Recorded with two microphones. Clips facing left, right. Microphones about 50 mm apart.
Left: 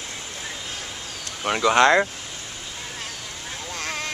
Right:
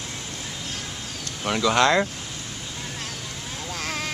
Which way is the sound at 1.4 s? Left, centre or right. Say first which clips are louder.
Left 3 dB; centre.